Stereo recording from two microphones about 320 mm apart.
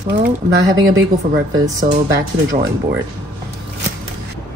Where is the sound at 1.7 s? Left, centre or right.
Centre.